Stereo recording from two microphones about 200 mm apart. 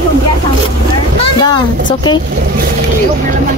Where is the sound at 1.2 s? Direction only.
20° left (ahead or behind).